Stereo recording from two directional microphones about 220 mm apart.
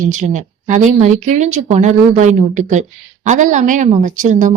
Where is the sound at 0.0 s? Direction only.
35° right (ahead or behind).